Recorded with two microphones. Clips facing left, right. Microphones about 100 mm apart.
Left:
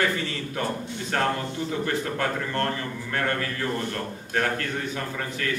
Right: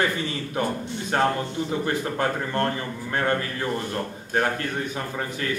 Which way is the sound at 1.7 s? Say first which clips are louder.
Even; 20° right (ahead or behind).